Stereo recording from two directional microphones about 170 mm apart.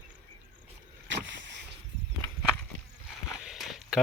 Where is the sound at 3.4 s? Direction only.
Centre (ahead or behind).